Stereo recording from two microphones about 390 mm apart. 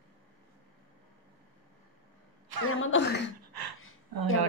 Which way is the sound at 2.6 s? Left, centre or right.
Left.